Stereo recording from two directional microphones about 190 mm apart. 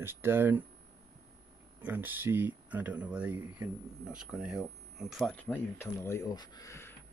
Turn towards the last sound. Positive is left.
turn(degrees=15)  # may be behind; listen again after turning